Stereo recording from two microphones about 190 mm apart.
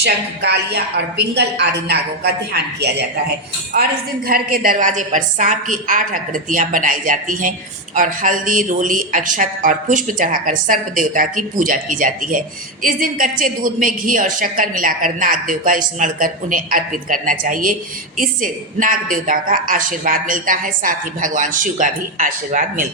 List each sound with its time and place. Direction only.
0.0 s a woman's voice: 60° right (ahead or behind)
4.3 s a woman's voice: 50° right (ahead or behind)